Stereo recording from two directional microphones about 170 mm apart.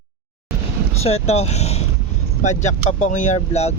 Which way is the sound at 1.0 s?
40° left (ahead or behind).